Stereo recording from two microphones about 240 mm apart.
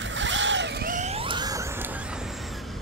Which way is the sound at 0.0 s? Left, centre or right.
Right.